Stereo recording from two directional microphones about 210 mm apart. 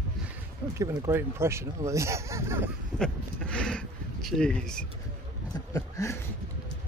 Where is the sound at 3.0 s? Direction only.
5° left (ahead or behind).